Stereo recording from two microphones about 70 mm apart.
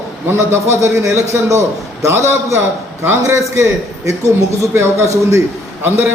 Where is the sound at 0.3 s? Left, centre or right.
Right.